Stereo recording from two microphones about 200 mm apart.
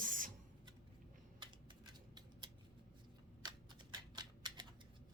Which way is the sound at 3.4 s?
20° right (ahead or behind).